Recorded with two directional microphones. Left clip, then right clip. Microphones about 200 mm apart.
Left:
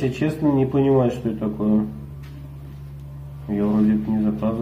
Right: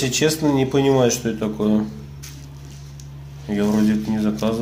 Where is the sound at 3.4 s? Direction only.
20° right (ahead or behind).